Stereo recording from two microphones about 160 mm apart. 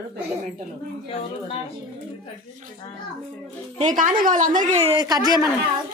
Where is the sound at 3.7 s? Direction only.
50° right (ahead or behind).